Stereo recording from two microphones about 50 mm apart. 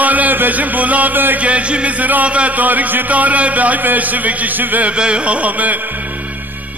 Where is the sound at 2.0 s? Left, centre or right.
Right.